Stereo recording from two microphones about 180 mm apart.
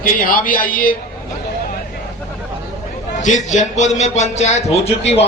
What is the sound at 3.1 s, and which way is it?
A man's voice, 40° left (ahead or behind).